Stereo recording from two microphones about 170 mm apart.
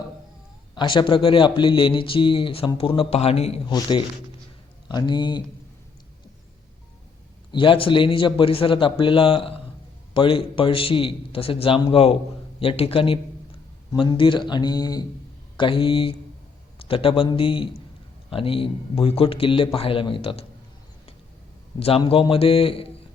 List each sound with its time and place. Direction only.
0.8 s speech: 30° left (ahead or behind)
7.5 s speech: 30° left (ahead or behind)
21.8 s speech: 35° left (ahead or behind)